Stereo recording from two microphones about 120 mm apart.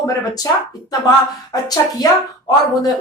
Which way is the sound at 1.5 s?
30° left (ahead or behind).